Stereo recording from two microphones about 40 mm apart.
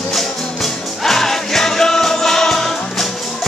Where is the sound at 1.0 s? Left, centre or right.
Centre.